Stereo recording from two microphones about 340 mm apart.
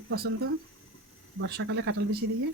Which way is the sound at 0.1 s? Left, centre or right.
Right.